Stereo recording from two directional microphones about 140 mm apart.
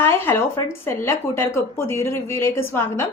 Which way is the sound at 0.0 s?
15° left (ahead or behind).